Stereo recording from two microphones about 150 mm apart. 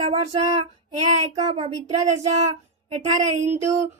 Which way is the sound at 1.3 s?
45° right (ahead or behind).